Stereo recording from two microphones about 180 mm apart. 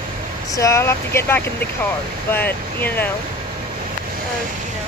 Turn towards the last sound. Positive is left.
turn(degrees=10)  # may be behind; listen again after turning